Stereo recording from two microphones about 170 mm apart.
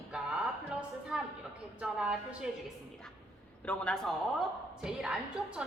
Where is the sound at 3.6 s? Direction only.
5° left (ahead or behind).